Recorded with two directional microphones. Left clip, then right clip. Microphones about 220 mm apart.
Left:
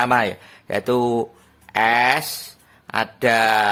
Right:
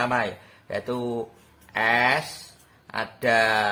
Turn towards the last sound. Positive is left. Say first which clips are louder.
# left 4 dB
turn(degrees=50)  # may be behind; listen again after turning